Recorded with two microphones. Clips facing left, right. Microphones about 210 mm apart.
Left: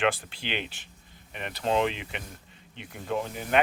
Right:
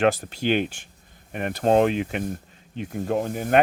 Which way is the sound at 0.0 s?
45° right (ahead or behind).